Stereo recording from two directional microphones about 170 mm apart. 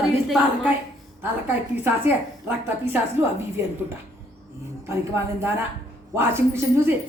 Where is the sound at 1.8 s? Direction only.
10° right (ahead or behind).